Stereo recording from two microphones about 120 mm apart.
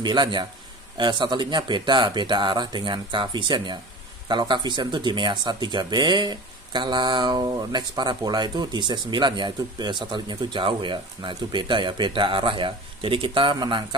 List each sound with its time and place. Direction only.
0.0 s speech: 40° right (ahead or behind)